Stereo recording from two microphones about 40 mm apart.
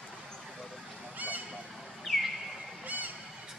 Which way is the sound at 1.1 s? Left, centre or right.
Right.